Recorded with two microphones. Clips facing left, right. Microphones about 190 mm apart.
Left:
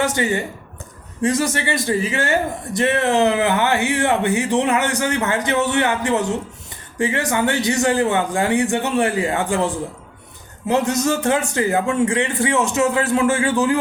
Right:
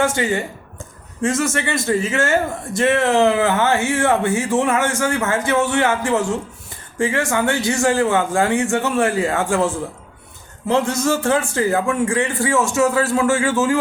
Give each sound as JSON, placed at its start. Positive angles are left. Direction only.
{"t": 0.0, "sound": "a man's voice", "side_deg": 20}
{"t": 1.9, "sound": "a man's voice", "side_deg": 15}